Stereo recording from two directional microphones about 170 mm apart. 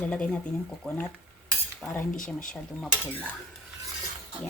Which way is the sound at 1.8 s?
5° left (ahead or behind).